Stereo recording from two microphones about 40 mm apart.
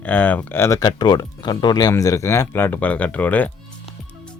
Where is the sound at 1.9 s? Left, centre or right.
Left.